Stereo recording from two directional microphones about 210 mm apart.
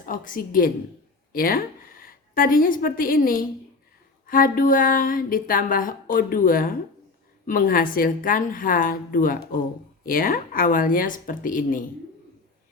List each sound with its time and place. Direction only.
0.0 s a woman's voice: 40° left (ahead or behind)